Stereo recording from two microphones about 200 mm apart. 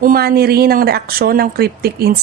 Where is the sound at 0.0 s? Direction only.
50° right (ahead or behind).